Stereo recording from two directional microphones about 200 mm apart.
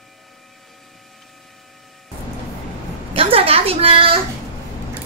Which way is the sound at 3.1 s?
30° right (ahead or behind).